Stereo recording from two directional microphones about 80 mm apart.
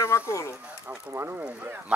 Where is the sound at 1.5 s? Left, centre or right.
Centre.